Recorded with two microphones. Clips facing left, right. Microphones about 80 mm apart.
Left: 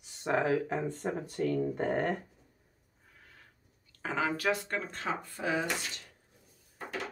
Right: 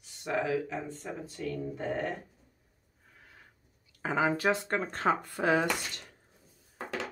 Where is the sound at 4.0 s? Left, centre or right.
Centre.